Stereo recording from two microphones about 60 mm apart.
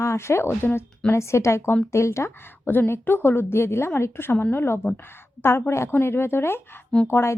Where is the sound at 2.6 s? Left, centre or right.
Left.